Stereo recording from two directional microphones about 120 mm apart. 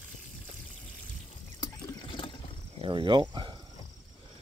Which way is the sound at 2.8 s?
40° right (ahead or behind).